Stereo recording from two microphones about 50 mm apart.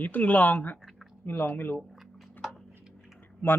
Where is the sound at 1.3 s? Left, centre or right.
Left.